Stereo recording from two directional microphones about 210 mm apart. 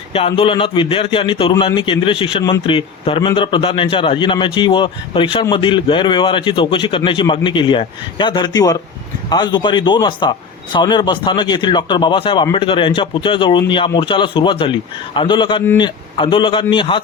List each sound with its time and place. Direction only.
0.1 s a man's voice: 25° left (ahead or behind)